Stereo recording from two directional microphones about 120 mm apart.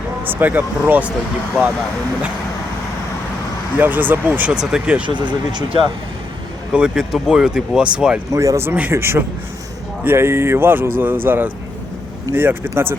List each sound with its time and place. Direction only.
0.3 s speech: 15° right (ahead or behind)
3.8 s speech: 15° right (ahead or behind)
5.0 s speech: 40° right (ahead or behind)
6.7 s speech: 5° right (ahead or behind)
8.3 s speech: 25° right (ahead or behind)